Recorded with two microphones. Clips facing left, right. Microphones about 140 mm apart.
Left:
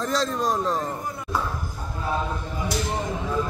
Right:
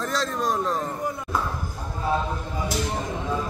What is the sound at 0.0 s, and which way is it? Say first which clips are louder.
Speech: left 2 dB; centre (ahead or behind).